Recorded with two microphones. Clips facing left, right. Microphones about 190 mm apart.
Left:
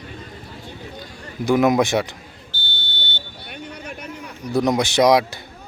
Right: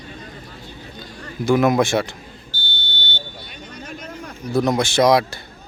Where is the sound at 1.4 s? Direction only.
15° left (ahead or behind).